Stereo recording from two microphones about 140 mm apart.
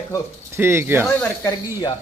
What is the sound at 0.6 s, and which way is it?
Speech, 15° right (ahead or behind).